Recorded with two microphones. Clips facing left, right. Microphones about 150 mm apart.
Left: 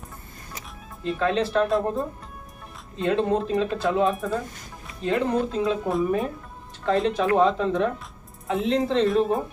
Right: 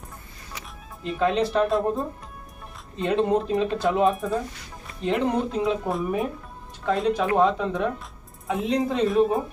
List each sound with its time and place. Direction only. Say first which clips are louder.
1.2 s speech: right 1 dB; 15° right (ahead or behind)
1.6 s speech: even; centre (ahead or behind)
3.2 s speech: right 3 dB; 10° right (ahead or behind)
3.8 s speech: right 1 dB; centre (ahead or behind)
5.0 s speech: even; 15° right (ahead or behind)
5.8 s speech: left 2 dB; centre (ahead or behind)
9.0 s speech: right 1 dB; centre (ahead or behind)